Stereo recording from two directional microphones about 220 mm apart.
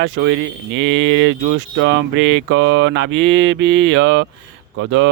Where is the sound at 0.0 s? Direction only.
55° right (ahead or behind).